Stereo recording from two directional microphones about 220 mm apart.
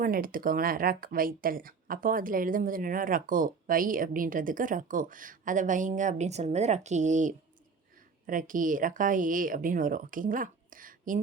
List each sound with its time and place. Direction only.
0.0 s speech: 40° right (ahead or behind)